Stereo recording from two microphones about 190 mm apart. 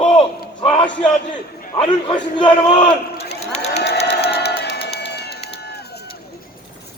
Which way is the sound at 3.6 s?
60° left (ahead or behind).